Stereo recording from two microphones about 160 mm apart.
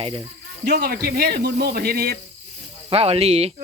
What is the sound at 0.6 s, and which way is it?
Speech, 70° right (ahead or behind).